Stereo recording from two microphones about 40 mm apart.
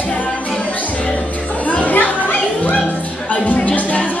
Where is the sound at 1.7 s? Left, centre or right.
Left.